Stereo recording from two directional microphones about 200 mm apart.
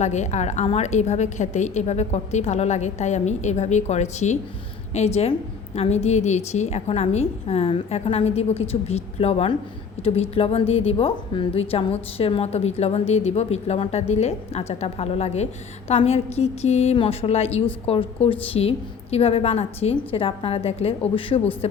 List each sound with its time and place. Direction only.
0.0 s a woman's voice: 35° left (ahead or behind)